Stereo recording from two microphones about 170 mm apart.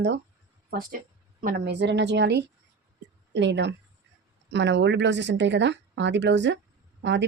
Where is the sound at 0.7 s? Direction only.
55° right (ahead or behind).